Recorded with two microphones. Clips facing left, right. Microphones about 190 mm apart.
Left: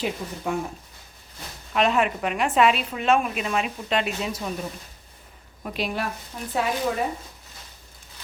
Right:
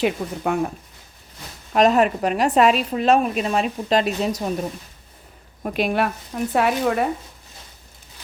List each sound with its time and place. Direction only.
0.0 s speech: 65° right (ahead or behind)
1.7 s speech: 40° right (ahead or behind)
5.6 s speech: 55° right (ahead or behind)